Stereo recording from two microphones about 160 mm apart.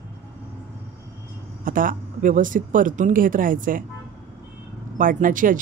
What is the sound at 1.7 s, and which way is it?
Speech, 60° right (ahead or behind).